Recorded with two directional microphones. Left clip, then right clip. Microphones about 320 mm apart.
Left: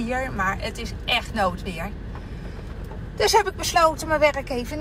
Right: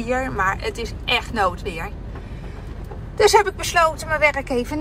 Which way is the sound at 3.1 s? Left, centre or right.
Centre.